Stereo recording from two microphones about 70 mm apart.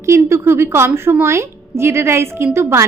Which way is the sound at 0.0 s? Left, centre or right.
Right.